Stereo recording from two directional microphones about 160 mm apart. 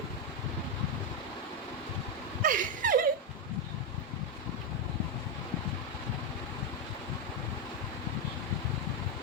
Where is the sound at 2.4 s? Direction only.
55° right (ahead or behind).